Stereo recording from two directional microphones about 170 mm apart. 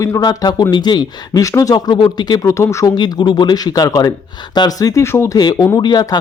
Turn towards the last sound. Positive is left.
turn(degrees=25)  # may be behind; listen again after turning